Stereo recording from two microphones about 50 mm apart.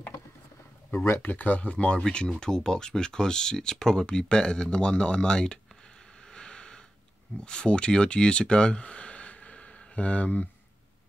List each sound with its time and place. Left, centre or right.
0.9 s speech: left
1.2 s speech: left; by 5.6 s centre
6.3 s a sound: centre
7.4 s speech: centre